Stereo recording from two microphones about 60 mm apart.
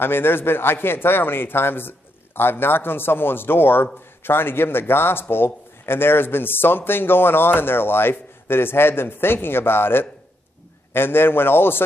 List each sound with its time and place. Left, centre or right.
0.0 s a man's voice: left